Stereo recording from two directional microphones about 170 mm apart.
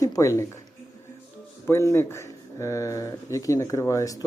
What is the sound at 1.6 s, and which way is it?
Speech, 15° left (ahead or behind).